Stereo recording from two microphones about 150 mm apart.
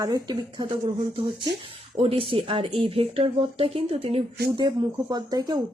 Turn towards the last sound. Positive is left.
turn(degrees=-25)  # may be behind; listen again after turning